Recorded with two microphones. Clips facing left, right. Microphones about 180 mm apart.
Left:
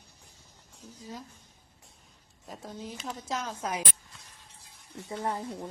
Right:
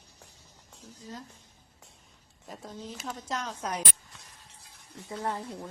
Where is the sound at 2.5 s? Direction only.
Centre (ahead or behind).